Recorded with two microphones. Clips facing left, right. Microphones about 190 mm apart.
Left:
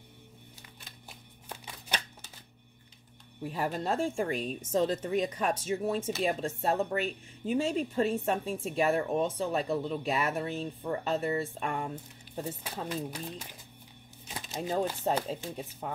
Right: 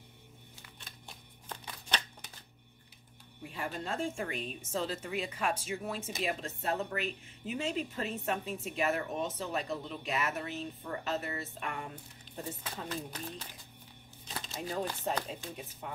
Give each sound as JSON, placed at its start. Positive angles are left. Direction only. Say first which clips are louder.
{"t": 1.0, "sound": "shuffling cards", "louder": "left 1 dB", "side_deg": 10}
{"t": 3.4, "sound": "speech", "louder": "left 7 dB", "side_deg": 40}
{"t": 12.8, "sound": "speech", "louder": "left 5 dB", "side_deg": 10}
{"t": 14.2, "sound": "a sound", "louder": "left 1 dB", "side_deg": 10}
{"t": 14.7, "sound": "speech", "louder": "left 6 dB", "side_deg": 30}